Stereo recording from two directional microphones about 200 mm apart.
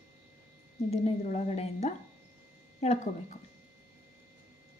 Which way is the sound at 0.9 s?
35° left (ahead or behind).